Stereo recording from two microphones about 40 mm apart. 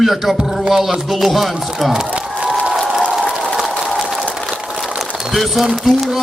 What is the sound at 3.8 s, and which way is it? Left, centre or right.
Applause, centre.